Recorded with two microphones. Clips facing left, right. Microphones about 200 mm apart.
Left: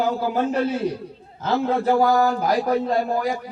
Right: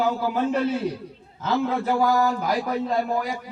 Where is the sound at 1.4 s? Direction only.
35° left (ahead or behind).